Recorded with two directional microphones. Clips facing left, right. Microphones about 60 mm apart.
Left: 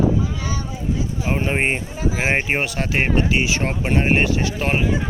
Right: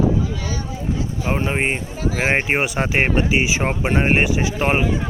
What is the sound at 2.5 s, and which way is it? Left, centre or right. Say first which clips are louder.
A man's voice: right 2 dB; centre.